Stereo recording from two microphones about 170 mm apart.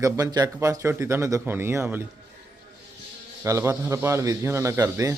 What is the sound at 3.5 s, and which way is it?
A man's voice, 15° right (ahead or behind).